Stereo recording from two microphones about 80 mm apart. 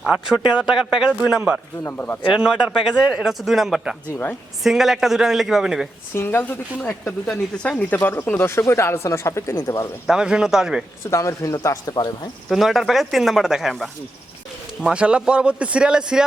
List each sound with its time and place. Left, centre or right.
0.0 s a man's voice: centre
1.9 s speech: left
2.3 s a man's voice: centre
3.3 s speech: centre
6.1 s speech: left; by 7.9 s centre
7.9 s speech: left
10.1 s a man's voice: centre
11.1 s speech: left
12.5 s speech: centre
14.8 s a man's voice: centre